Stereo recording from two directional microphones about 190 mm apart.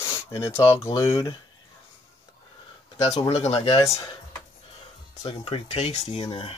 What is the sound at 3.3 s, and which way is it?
Speech, 35° left (ahead or behind).